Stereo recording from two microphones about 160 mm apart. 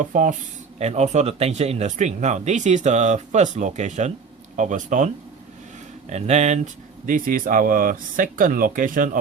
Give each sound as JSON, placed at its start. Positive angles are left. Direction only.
{"t": 0.0, "sound": "speech", "side_deg": -55}
{"t": 0.8, "sound": "speech", "side_deg": -40}
{"t": 7.0, "sound": "speech", "side_deg": -60}